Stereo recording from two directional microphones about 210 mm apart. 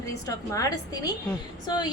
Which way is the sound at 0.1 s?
15° left (ahead or behind).